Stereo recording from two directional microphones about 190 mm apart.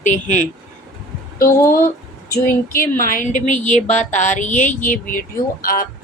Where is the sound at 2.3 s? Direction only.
50° left (ahead or behind).